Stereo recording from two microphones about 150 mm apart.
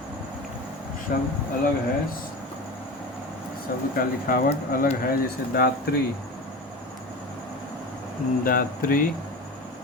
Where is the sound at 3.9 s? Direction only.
75° left (ahead or behind).